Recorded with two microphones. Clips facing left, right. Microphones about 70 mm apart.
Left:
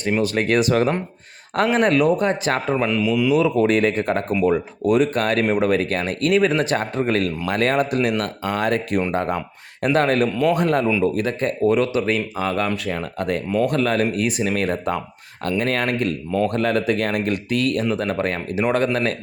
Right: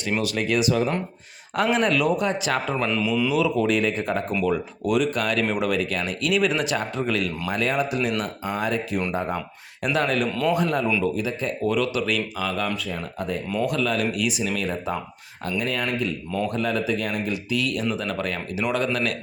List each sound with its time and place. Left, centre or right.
0.2 s speech: left
0.4 s speech: left
2.7 s speech: centre
3.3 s speech: left
9.8 s speech: left
12.7 s speech: left
13.5 s speech: left